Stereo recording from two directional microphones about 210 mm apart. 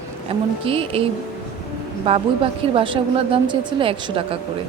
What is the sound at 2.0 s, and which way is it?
Speech, 25° right (ahead or behind).